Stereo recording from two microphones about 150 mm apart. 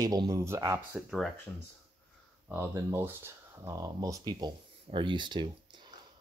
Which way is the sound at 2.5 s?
15° right (ahead or behind).